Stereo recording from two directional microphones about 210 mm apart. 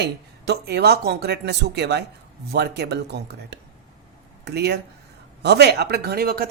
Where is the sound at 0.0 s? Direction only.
50° right (ahead or behind).